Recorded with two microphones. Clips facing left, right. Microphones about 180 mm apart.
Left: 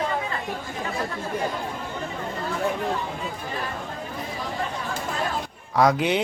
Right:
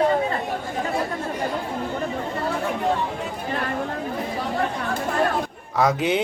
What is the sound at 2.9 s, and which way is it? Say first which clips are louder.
Chatter: right 3 dB; 70° right (ahead or behind).